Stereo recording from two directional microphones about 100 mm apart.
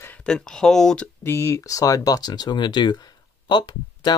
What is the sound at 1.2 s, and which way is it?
Speech, 25° left (ahead or behind).